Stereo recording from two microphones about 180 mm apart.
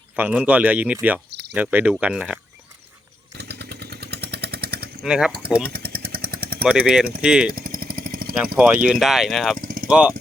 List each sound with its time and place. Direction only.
0.2 s speech: 10° right (ahead or behind)
3.3 s vehicle: 65° right (ahead or behind)
5.0 s speech: 5° right (ahead or behind)
5.6 s vehicle: 55° right (ahead or behind)
6.6 s speech: 5° right (ahead or behind)
7.5 s vehicle: 55° right (ahead or behind)
8.5 s speech: 5° right (ahead or behind)
9.6 s vehicle: 55° right (ahead or behind)
9.9 s speech: 5° right (ahead or behind)